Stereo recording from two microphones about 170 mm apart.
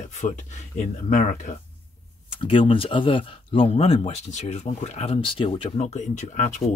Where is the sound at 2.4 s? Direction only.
30° left (ahead or behind).